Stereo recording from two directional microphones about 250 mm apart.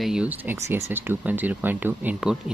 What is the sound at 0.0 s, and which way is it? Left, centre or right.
Speech, centre.